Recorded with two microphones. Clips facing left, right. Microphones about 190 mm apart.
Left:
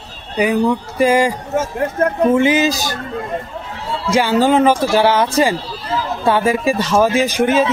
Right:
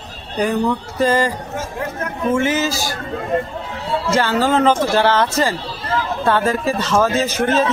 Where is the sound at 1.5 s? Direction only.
50° left (ahead or behind).